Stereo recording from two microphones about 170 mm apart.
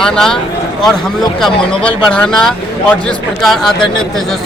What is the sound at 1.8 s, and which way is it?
Speech, 5° left (ahead or behind).